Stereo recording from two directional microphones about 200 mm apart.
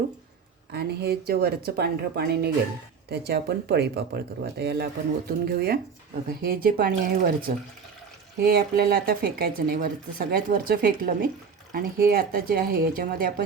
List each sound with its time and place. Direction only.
0.7 s speech: 50° right (ahead or behind)